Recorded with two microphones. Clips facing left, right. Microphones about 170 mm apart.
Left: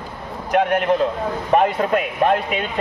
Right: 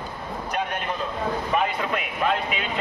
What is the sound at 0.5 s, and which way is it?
Speech, 85° left.